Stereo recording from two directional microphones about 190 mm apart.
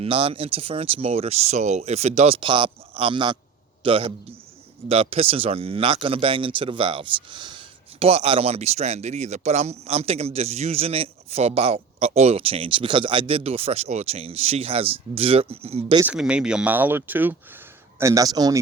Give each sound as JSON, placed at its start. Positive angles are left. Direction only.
{"t": 0.0, "sound": "speech", "side_deg": -30}
{"t": 16.0, "sound": "speech", "side_deg": -5}